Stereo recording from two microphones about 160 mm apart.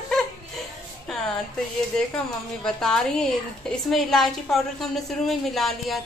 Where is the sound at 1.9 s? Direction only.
5° left (ahead or behind).